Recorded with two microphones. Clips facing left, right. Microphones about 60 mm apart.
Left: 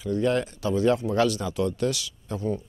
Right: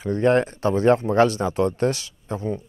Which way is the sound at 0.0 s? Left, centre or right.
Right.